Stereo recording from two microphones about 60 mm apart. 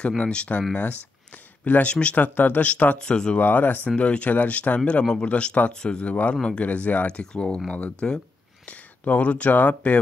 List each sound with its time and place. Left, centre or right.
0.2 s speech: centre
3.0 s speech: centre
3.3 s speech: left